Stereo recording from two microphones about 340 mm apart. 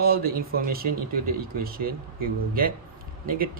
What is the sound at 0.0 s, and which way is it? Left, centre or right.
Speech, right.